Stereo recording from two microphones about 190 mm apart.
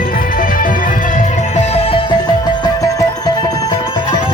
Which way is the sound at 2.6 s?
20° left (ahead or behind).